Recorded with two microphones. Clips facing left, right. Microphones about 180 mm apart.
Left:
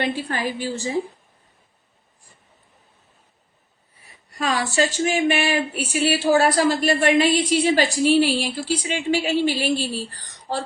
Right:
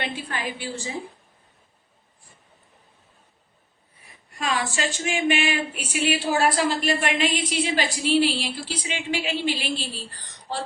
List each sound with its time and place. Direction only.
0.0 s speech: 40° left (ahead or behind)
4.4 s speech: 35° left (ahead or behind)